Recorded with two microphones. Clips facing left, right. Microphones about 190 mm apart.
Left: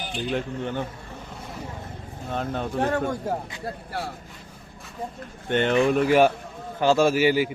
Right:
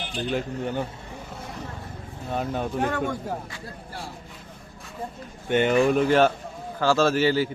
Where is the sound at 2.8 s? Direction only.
40° left (ahead or behind).